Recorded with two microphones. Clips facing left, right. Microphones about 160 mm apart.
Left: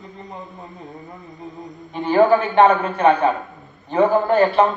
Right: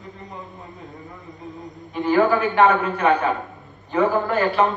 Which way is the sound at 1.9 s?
30° left (ahead or behind).